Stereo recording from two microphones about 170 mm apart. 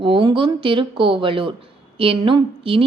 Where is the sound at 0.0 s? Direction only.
30° right (ahead or behind).